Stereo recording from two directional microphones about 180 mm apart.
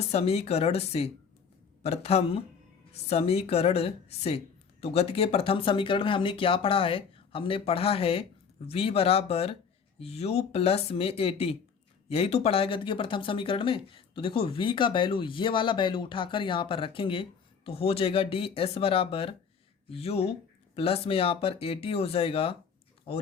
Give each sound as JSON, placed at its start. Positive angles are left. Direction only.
{"t": 0.1, "sound": "speech", "side_deg": 35}